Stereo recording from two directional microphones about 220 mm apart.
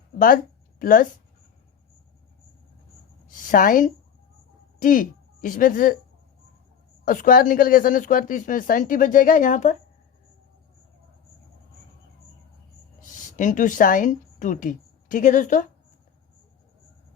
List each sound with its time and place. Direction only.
0.8 s speech: 40° left (ahead or behind)
3.2 s a woman's voice: 40° left (ahead or behind)
7.0 s speech: 40° left (ahead or behind)
13.0 s a woman's voice: 35° left (ahead or behind)